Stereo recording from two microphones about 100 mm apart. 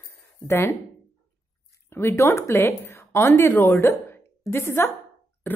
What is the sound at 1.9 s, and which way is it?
A woman's voice, 25° left (ahead or behind).